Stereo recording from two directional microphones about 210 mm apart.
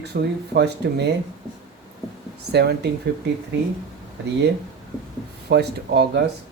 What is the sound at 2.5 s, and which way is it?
Speech, 50° right (ahead or behind).